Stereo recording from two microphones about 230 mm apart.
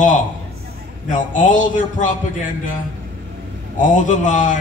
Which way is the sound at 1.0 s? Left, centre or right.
Left.